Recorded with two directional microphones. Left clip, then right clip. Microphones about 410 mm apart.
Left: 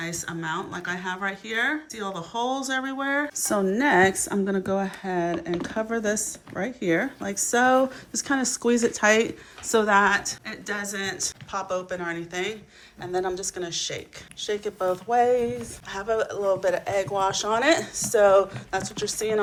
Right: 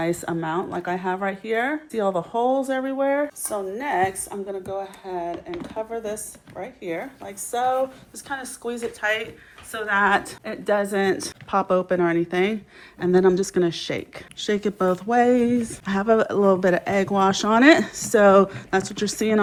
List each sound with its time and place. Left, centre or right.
0.0 s speech: centre
3.8 s speech: left; by 10.1 s centre
10.1 s speech: centre